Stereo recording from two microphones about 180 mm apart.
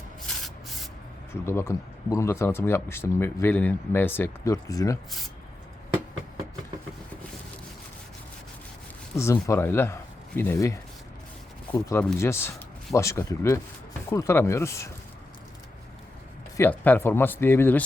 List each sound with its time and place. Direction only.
0.3 s rub: centre (ahead or behind)
1.3 s speech: 15° left (ahead or behind)
9.1 s speech: 15° left (ahead or behind)
16.6 s speech: 10° left (ahead or behind)